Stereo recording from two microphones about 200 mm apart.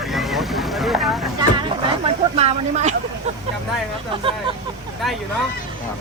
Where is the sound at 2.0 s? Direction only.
30° right (ahead or behind).